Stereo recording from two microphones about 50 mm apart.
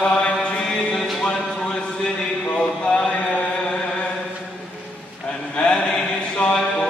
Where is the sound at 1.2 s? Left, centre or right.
Centre.